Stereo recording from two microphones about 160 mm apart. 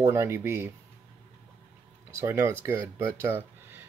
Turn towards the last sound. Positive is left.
turn(degrees=-15)  # may be behind; listen again after turning